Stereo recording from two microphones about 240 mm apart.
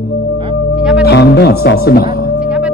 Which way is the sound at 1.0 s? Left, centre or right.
Left.